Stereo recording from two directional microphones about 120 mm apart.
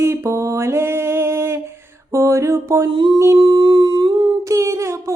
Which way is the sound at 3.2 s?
25° right (ahead or behind).